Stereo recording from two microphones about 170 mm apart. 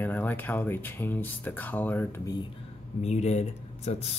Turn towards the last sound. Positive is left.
turn(degrees=40)  # may be behind; listen again after turning